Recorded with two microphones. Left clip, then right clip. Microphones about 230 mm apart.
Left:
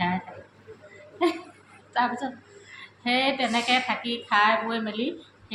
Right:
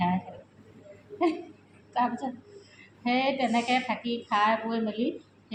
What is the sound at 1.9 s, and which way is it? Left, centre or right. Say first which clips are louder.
A woman's voice: left 3 dB; centre.